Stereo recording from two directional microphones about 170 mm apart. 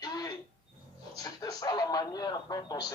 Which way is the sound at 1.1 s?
20° left (ahead or behind).